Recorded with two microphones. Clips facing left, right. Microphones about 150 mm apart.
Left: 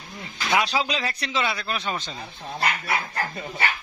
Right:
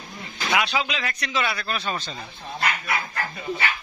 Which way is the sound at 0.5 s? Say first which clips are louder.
Left 1 dB; 35° left (ahead or behind).